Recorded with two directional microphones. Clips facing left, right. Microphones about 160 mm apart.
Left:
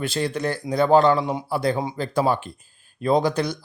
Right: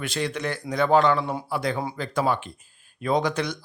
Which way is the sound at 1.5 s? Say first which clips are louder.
Left 4 dB; 35° left (ahead or behind).